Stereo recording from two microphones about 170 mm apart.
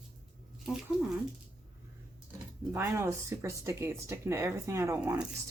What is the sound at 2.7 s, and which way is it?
Speech, 15° right (ahead or behind).